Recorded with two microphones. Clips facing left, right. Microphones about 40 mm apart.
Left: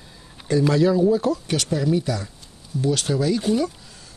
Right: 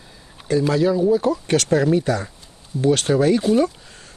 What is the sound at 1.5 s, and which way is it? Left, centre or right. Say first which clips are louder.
A man's voice: right 5 dB; right.